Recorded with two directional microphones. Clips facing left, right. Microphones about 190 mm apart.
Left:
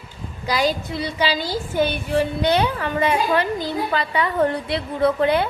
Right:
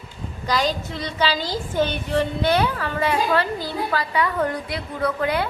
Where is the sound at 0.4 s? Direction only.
10° left (ahead or behind); by 5.5 s 25° left (ahead or behind).